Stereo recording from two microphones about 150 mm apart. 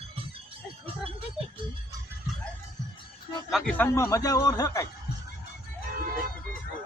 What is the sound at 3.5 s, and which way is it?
A man's voice, 10° left (ahead or behind).